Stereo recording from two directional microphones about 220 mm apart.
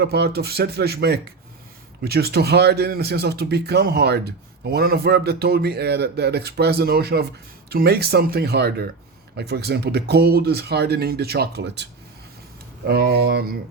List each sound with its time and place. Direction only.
0.0 s a man's voice: 45° right (ahead or behind)